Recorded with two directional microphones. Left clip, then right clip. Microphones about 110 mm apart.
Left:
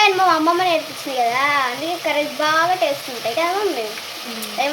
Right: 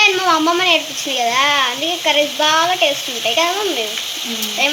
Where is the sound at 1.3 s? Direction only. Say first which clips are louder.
Right 5 dB; 5° right (ahead or behind).